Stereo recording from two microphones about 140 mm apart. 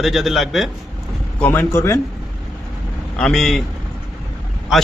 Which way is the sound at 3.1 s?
5° left (ahead or behind).